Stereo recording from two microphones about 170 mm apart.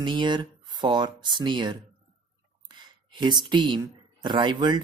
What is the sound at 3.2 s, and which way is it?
Speech, 25° right (ahead or behind).